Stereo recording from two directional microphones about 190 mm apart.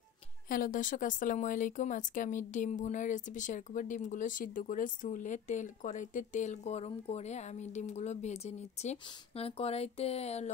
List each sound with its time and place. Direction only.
0.5 s speech: 45° left (ahead or behind)